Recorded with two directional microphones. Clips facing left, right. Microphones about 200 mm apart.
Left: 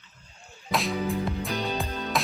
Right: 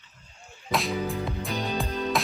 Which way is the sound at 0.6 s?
Centre (ahead or behind).